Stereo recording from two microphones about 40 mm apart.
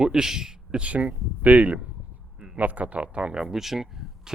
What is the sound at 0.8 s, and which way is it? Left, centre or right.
Speech, right.